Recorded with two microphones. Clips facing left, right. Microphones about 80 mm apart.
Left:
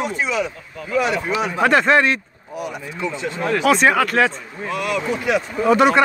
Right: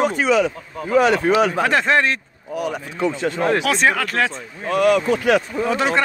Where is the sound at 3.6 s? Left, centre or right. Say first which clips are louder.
Left 3 dB; centre.